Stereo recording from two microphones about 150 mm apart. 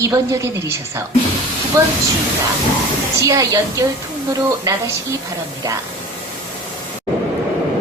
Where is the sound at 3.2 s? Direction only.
20° right (ahead or behind).